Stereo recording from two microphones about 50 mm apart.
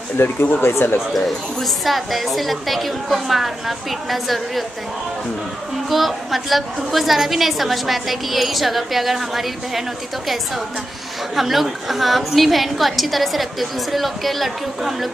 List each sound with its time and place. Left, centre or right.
0.2 s speech: left
1.1 s a woman's voice: centre
5.9 s a woman's voice: centre